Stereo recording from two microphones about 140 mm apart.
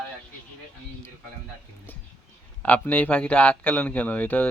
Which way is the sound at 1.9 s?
15° left (ahead or behind).